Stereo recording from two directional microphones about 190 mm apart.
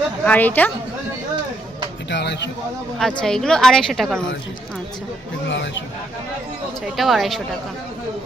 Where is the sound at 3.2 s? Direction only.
5° left (ahead or behind).